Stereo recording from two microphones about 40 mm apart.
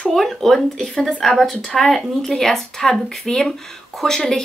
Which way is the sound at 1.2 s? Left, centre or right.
Centre.